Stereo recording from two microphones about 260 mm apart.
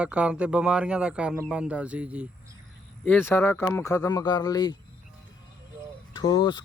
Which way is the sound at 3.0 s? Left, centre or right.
Centre.